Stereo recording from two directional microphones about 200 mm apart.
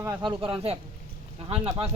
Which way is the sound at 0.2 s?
25° right (ahead or behind).